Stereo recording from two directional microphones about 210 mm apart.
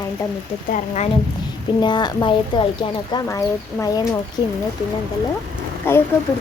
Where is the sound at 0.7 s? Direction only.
35° left (ahead or behind).